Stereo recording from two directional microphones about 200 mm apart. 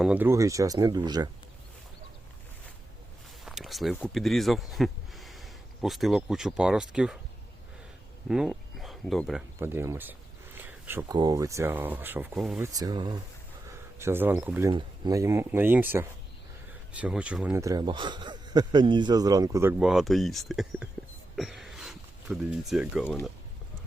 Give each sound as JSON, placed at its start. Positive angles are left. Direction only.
{"t": 0.0, "sound": "speech", "side_deg": -10}
{"t": 3.4, "sound": "speech", "side_deg": 0}
{"t": 8.3, "sound": "speech", "side_deg": 0}
{"t": 9.6, "sound": "a sound", "side_deg": -10}
{"t": 11.2, "sound": "speech", "side_deg": -20}
{"t": 12.6, "sound": "speech", "side_deg": -20}
{"t": 14.7, "sound": "speech", "side_deg": -20}
{"t": 19.8, "sound": "speech", "side_deg": 0}
{"t": 21.3, "sound": "a sound", "side_deg": 0}
{"t": 23.0, "sound": "speech", "side_deg": 5}